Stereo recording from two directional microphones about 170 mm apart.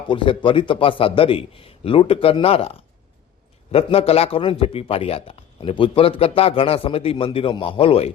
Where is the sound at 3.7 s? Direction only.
35° left (ahead or behind).